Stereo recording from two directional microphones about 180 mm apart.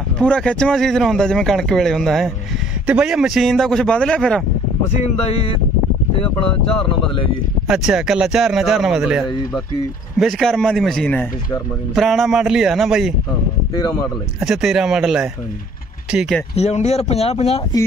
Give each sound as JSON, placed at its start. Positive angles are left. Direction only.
{"t": 0.2, "sound": "speech", "side_deg": 5}
{"t": 7.6, "sound": "speech", "side_deg": -5}
{"t": 14.4, "sound": "speech", "side_deg": 0}
{"t": 16.5, "sound": "speech", "side_deg": 40}